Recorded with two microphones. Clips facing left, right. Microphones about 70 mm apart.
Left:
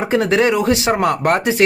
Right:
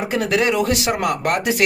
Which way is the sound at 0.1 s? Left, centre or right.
Left.